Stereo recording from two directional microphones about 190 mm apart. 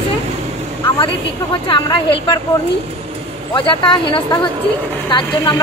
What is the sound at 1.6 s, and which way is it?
Speech, 25° left (ahead or behind).